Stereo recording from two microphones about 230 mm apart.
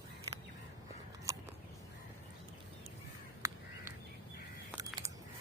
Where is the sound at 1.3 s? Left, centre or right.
Centre.